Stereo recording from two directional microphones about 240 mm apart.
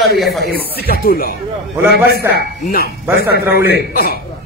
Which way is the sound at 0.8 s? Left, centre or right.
Left.